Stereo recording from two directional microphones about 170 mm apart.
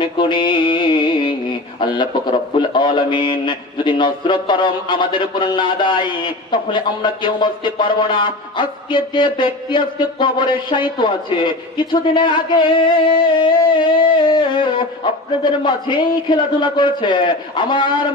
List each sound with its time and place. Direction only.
0.0 s music: 25° left (ahead or behind)
1.8 s a man's voice: 25° left (ahead or behind)